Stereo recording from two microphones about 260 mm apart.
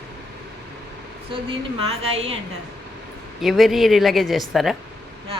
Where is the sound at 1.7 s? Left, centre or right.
Right.